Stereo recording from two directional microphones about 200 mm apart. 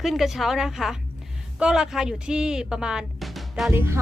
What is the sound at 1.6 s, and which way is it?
Speech, 5° right (ahead or behind).